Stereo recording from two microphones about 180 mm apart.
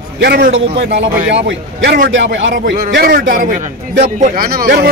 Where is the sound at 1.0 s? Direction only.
85° right.